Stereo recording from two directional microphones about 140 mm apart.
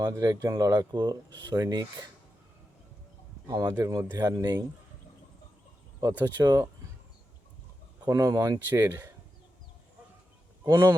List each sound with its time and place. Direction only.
0.0 s speech: 25° right (ahead or behind)
3.4 s speech: 25° right (ahead or behind)
6.0 s speech: 15° right (ahead or behind)
6.4 s speech: 30° right (ahead or behind)
8.1 s speech: 25° right (ahead or behind)
10.7 s speech: 15° right (ahead or behind)